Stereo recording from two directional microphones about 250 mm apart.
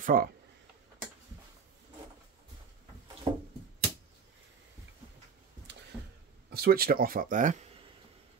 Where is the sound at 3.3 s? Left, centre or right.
Centre.